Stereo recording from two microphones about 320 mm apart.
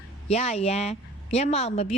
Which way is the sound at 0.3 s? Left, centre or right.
Centre.